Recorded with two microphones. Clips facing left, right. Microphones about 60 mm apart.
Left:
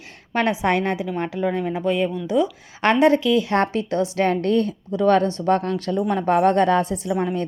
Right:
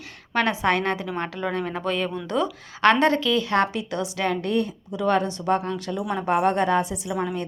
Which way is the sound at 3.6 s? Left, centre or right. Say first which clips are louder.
Left 3 dB; left.